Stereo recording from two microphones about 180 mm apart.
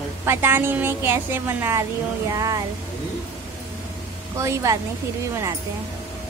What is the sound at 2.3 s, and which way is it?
Music, 20° right (ahead or behind).